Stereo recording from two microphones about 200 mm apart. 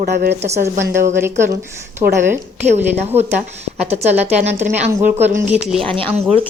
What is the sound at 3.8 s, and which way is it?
A woman's voice, 30° right (ahead or behind).